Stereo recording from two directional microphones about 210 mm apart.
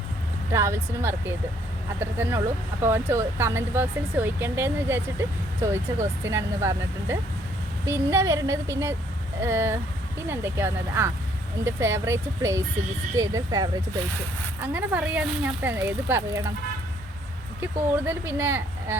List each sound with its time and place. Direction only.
0.5 s speech: 10° right (ahead or behind)
17.6 s speech: 10° right (ahead or behind)